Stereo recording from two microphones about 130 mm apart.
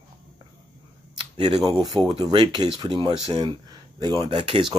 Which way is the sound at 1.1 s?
40° right (ahead or behind).